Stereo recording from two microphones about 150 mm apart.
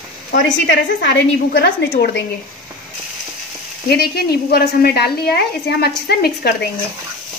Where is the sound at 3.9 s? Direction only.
90° left.